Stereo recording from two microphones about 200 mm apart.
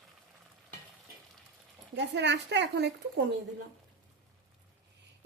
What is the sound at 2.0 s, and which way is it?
Speech, 60° right (ahead or behind).